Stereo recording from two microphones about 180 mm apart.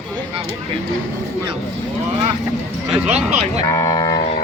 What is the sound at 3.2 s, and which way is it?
Speech, 40° right (ahead or behind).